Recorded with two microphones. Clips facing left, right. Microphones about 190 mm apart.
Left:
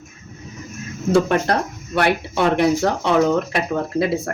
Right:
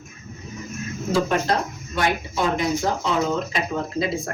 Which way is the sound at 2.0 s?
65° left (ahead or behind).